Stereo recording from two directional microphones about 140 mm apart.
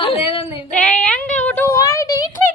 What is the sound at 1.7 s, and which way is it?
Speech, 20° left (ahead or behind).